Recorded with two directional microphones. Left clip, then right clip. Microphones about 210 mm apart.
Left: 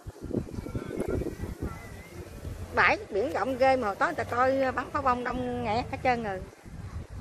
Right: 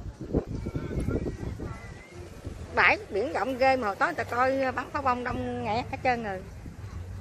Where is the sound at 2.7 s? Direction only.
5° right (ahead or behind).